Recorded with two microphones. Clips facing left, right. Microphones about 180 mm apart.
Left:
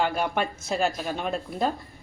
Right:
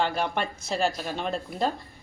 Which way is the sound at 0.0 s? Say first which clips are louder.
Left 1 dB; 5° left (ahead or behind).